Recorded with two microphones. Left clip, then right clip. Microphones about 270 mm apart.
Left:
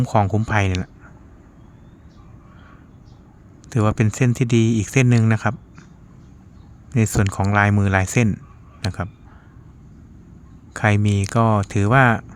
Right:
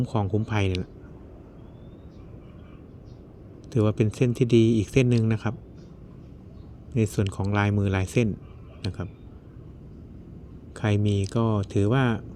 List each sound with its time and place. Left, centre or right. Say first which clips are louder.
0.5 s speech: left 9 dB; centre
3.7 s speech: left 3 dB; left
6.9 s speech: left 5 dB; left
8.8 s clicking: left 8 dB; left
10.8 s speech: left 7 dB; left